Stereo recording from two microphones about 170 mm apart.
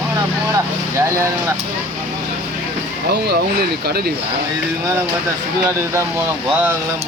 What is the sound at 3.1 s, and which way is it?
Speech, 70° right (ahead or behind).